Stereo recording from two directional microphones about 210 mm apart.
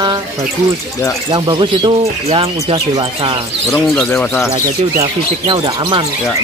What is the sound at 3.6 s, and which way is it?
Speech, centre (ahead or behind).